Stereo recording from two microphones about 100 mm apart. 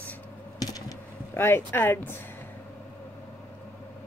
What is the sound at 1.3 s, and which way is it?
Speech, 25° left (ahead or behind).